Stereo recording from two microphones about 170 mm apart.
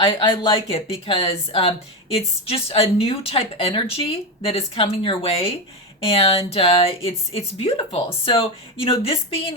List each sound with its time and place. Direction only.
0.0 s speech: 30° left (ahead or behind)